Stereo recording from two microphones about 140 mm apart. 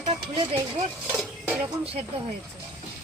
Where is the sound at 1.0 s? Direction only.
5° right (ahead or behind).